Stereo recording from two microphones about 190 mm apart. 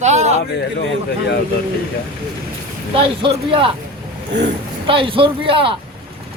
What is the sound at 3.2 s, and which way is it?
Speech, 30° right (ahead or behind).